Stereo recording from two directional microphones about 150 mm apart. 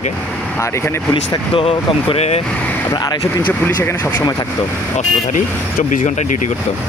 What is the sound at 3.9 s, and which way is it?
Speech, 10° left (ahead or behind).